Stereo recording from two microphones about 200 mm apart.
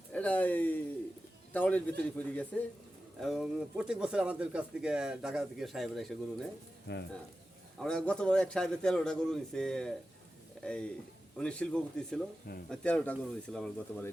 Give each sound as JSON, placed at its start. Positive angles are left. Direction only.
{"t": 0.1, "sound": "a sound", "side_deg": 5}
{"t": 1.5, "sound": "speech", "side_deg": 10}
{"t": 6.9, "sound": "speech", "side_deg": 60}
{"t": 7.8, "sound": "speech", "side_deg": 5}
{"t": 12.5, "sound": "speech", "side_deg": 50}
{"t": 12.8, "sound": "speech", "side_deg": 5}